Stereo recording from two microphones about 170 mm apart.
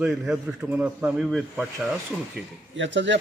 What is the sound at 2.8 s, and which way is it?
Speech, 90° right.